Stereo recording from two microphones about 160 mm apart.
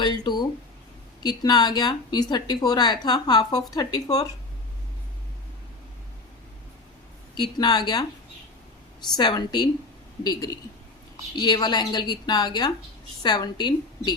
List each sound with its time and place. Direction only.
0.0 s speech: 25° left (ahead or behind)
7.3 s speech: 25° left (ahead or behind)
9.1 s speech: 25° left (ahead or behind)
11.3 s speech: 25° left (ahead or behind)